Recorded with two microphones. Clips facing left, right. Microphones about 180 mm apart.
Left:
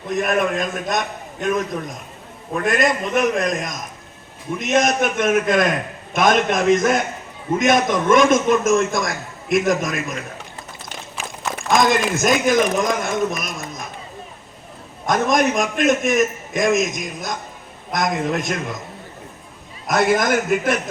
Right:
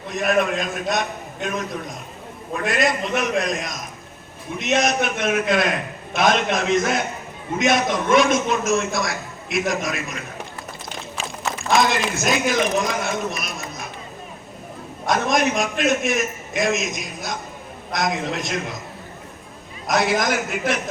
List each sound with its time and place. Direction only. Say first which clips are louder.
0.2 s a man's voice: even; 50° left (ahead or behind)
2.6 s a man's voice: left 2 dB; 50° left (ahead or behind)
11.7 s a man's voice: left 3 dB; 50° left (ahead or behind)
15.0 s a man's voice: left 2 dB; 50° left (ahead or behind)
19.9 s a man's voice: left 3 dB; 50° left (ahead or behind)